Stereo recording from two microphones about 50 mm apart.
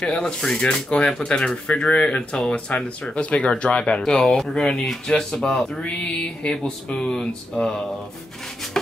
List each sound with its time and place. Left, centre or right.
0.0 s speech: centre
0.8 s speech: left
1.1 s speech: centre